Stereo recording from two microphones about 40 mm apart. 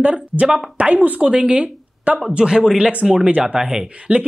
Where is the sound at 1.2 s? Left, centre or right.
Right.